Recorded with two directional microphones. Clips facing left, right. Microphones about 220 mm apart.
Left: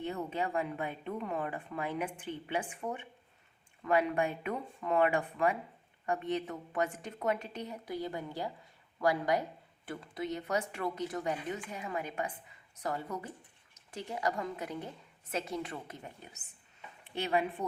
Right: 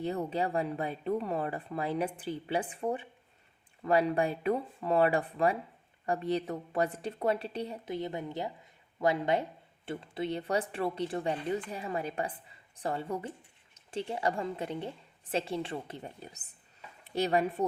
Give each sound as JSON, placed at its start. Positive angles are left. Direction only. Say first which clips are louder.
{"t": 0.0, "sound": "a woman's voice", "louder": "right 4 dB", "side_deg": -35}